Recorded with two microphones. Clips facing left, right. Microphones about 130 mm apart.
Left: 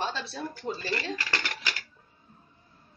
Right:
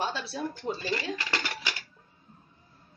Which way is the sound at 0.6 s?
20° right (ahead or behind).